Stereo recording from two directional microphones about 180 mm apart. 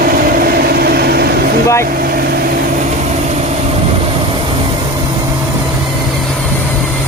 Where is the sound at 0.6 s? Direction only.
60° right (ahead or behind).